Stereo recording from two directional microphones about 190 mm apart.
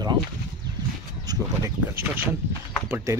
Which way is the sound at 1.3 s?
15° right (ahead or behind).